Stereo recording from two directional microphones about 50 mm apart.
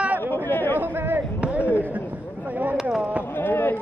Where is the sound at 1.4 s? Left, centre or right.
Right.